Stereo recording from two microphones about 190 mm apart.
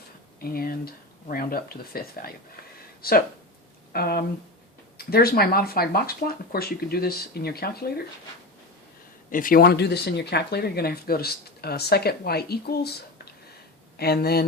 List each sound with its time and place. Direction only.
0.3 s speech: 50° left (ahead or behind)
9.3 s speech: 45° left (ahead or behind)